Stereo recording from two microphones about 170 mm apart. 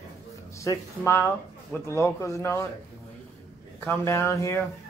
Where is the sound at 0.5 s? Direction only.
20° left (ahead or behind).